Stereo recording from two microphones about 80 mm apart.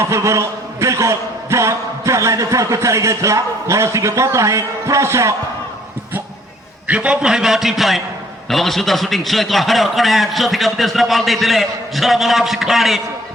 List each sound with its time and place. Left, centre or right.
0.0 s a man's voice: right
6.8 s a man's voice: centre